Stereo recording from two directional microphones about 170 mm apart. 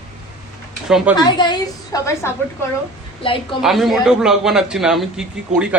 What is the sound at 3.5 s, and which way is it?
A man's voice, centre (ahead or behind).